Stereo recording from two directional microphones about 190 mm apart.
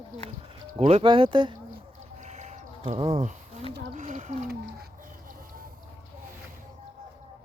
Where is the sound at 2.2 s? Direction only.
35° right (ahead or behind).